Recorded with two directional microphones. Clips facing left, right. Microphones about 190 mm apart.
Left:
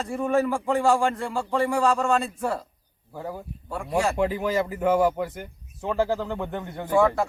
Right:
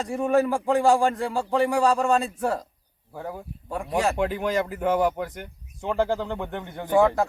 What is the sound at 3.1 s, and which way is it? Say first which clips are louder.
Speech: even; 5° left (ahead or behind).